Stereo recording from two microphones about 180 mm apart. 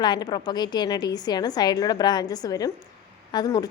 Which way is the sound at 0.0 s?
25° left (ahead or behind).